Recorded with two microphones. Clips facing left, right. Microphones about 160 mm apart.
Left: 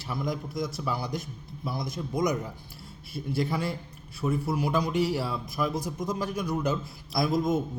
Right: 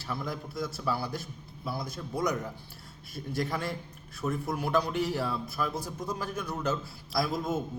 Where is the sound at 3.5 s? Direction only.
10° left (ahead or behind).